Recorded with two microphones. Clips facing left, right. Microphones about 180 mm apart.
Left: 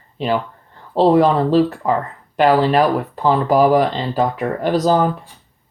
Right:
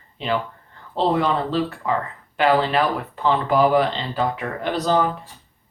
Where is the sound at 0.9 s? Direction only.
40° left (ahead or behind).